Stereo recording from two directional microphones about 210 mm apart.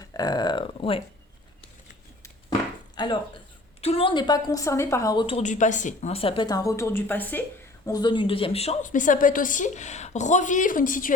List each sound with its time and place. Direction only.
0.0 s speech: 20° left (ahead or behind)
2.9 s a woman's voice: 20° left (ahead or behind)
7.9 s a woman's voice: 20° left (ahead or behind); by 11.1 s 40° left (ahead or behind)